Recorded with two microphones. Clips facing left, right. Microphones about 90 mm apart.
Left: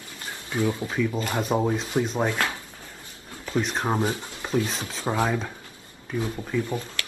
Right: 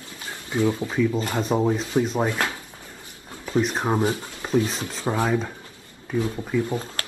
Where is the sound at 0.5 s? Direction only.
25° right (ahead or behind).